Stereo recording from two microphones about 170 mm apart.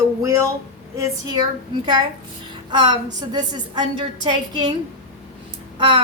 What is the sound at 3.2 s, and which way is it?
A woman's voice, 25° right (ahead or behind).